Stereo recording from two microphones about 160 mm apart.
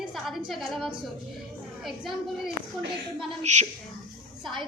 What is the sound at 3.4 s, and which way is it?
Speech, 45° right (ahead or behind).